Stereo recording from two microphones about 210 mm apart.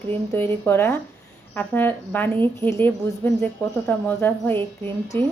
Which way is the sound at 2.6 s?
25° right (ahead or behind).